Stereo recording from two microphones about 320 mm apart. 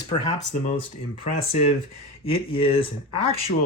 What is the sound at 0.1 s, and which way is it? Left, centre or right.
Speech, centre.